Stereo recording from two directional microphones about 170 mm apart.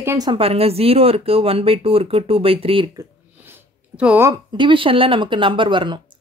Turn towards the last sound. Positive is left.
turn(degrees=-30)  # may be behind; listen again after turning